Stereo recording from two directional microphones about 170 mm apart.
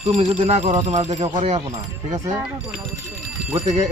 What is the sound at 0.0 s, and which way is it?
Speech, 40° right (ahead or behind).